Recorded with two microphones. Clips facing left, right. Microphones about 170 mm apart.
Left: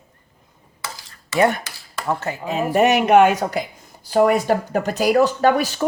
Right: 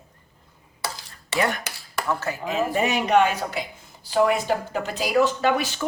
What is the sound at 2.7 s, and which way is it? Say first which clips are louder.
Speech: left 7 dB; 70° left (ahead or behind).